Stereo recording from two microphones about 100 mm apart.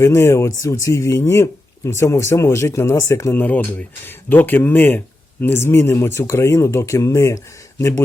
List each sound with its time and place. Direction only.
0.0 s speech: 25° left (ahead or behind)
3.3 s speech: 20° left (ahead or behind)